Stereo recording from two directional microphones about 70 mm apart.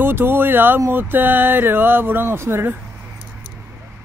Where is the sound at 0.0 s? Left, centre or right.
Right.